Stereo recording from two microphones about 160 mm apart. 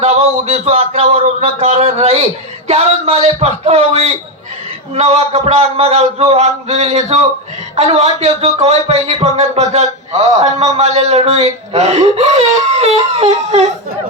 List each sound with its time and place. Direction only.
0.0 s a man's voice: 40° right (ahead or behind)